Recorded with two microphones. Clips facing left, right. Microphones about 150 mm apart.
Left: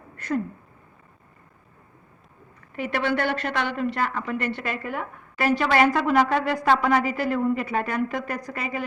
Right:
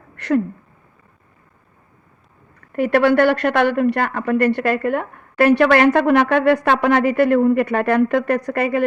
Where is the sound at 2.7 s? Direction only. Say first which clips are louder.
Right 10 dB; 55° right (ahead or behind).